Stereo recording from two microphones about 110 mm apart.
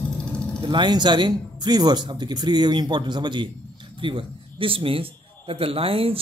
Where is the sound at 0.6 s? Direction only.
45° right (ahead or behind).